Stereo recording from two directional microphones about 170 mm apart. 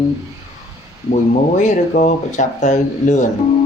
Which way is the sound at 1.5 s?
45° left (ahead or behind).